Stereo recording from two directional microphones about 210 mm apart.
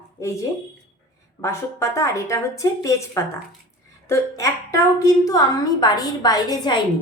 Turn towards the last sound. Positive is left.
turn(degrees=20)  # may be behind; listen again after turning